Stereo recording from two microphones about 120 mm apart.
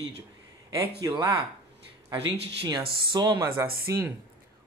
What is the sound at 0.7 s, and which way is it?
Speech, 30° right (ahead or behind).